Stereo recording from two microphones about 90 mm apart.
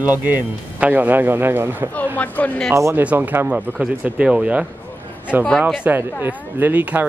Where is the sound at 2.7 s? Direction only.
35° right (ahead or behind).